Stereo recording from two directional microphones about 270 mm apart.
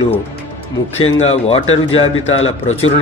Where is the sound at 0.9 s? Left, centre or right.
Left.